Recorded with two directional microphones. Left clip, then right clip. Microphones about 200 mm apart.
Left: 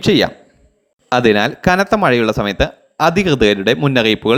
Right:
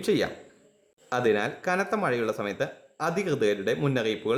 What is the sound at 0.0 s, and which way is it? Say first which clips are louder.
Speech: left 12 dB; 30° left (ahead or behind).